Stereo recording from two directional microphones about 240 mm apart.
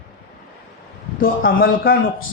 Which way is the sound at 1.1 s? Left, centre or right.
Left.